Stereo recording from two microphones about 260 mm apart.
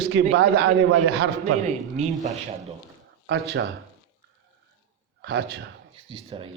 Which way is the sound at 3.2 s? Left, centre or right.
Right.